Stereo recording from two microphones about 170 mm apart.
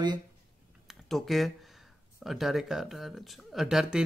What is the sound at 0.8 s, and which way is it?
Speech, centre (ahead or behind).